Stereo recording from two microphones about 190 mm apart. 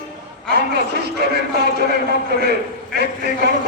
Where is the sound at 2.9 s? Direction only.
60° right (ahead or behind).